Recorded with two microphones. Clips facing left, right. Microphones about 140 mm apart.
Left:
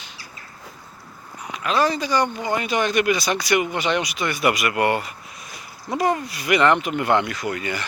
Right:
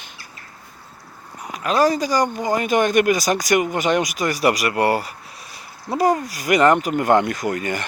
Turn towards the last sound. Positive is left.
turn(degrees=-45)  # may be behind; listen again after turning